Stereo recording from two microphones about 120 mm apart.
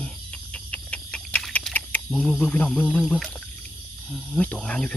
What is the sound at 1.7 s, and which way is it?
Speech, 10° left (ahead or behind).